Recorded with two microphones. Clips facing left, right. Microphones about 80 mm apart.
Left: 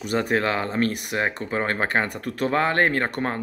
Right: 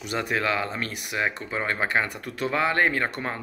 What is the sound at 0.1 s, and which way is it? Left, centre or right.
Speech, left.